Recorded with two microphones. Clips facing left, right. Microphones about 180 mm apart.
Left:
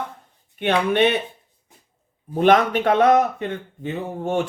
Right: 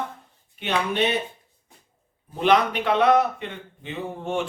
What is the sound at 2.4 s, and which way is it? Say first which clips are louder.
Speech: left 4 dB; 45° left (ahead or behind).